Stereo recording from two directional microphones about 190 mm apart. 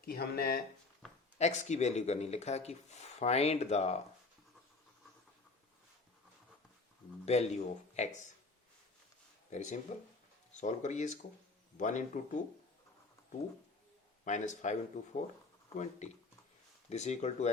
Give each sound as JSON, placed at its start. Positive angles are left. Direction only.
{"t": 0.0, "sound": "speech", "side_deg": 55}
{"t": 1.4, "sound": "speech", "side_deg": 35}
{"t": 7.3, "sound": "speech", "side_deg": 35}
{"t": 9.5, "sound": "speech", "side_deg": 40}
{"t": 14.3, "sound": "speech", "side_deg": 40}